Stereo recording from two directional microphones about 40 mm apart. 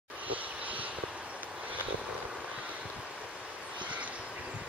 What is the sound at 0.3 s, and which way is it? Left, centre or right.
Vehicle, right.